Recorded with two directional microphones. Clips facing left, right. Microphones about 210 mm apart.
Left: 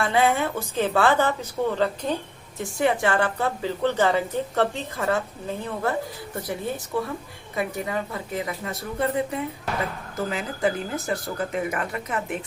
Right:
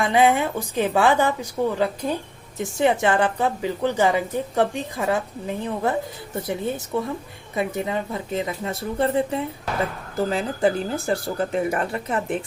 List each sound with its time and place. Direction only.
0.0 s a woman's voice: 15° right (ahead or behind)
2.6 s a woman's voice: 20° right (ahead or behind)
6.9 s speech: 20° right (ahead or behind)